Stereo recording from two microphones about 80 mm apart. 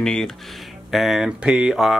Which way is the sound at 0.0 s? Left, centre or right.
Centre.